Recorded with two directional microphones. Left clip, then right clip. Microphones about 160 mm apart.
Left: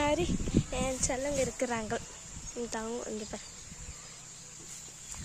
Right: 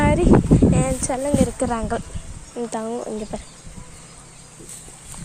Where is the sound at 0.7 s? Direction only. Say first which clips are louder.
Right 10 dB; 5° left (ahead or behind).